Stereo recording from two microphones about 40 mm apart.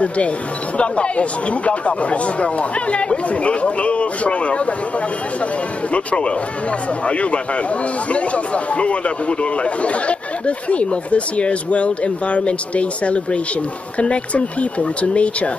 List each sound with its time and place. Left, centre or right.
0.7 s a man's voice: left
5.9 s a man's voice: left